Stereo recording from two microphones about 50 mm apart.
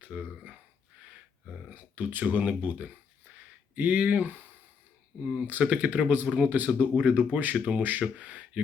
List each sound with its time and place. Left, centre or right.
0.1 s speech: right
1.7 s speech: right
5.2 s speech: right